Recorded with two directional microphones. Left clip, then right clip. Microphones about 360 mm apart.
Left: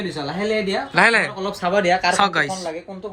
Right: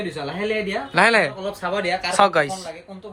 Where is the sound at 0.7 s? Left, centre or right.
Centre.